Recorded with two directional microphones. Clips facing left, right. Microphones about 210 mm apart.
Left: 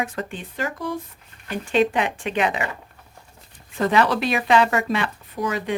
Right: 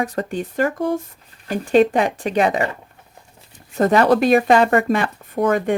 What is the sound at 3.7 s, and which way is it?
Speech, 45° right (ahead or behind).